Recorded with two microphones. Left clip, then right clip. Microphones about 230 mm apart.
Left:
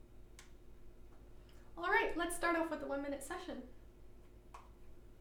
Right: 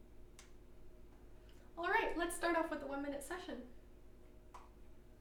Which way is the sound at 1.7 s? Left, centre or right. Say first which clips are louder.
Left 2 dB; left.